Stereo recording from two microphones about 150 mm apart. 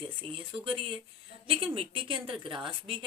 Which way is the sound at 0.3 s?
35° right (ahead or behind).